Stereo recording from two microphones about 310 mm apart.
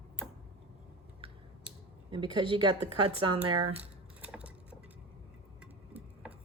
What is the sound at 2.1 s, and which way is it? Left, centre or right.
Speech, centre.